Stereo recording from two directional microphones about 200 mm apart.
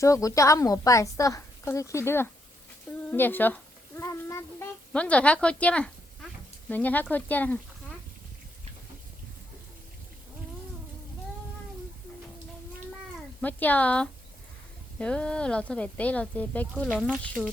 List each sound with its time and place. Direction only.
0.0 s a woman's voice: 15° left (ahead or behind)
4.0 s child singing: 15° left (ahead or behind)
4.9 s a woman's voice: 5° left (ahead or behind)
13.4 s a woman's voice: 10° left (ahead or behind)